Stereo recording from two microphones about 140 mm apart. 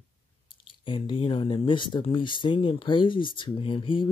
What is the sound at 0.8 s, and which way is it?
Speech, 35° left (ahead or behind).